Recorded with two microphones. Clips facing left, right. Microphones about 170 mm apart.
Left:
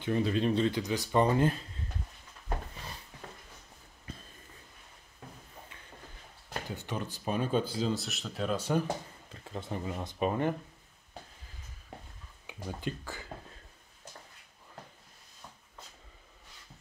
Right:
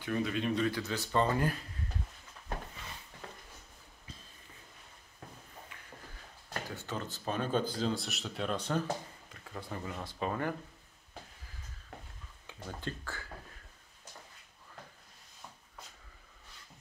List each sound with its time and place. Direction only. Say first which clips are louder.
0.0 s speech: left 4 dB; 30° left (ahead or behind)
0.7 s speech: left 4 dB; 20° left (ahead or behind)
4.1 s a sound: left 6 dB; 55° left (ahead or behind)
6.7 s speech: left 4 dB; 15° left (ahead or behind)
9.3 s speech: left 4 dB; 25° left (ahead or behind)
12.6 s speech: left 3 dB; 15° left (ahead or behind)